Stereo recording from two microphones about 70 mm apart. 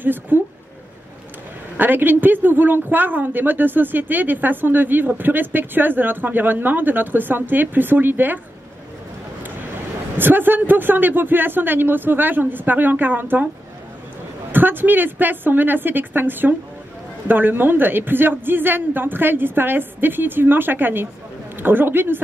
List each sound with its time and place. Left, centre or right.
0.0 s a woman's voice: right
1.8 s a woman's voice: right
10.1 s a woman's voice: right
14.5 s a woman's voice: right